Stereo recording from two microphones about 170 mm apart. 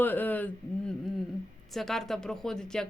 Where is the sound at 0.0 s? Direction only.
10° left (ahead or behind).